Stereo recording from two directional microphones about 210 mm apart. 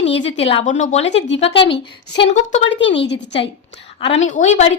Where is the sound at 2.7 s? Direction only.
60° left (ahead or behind).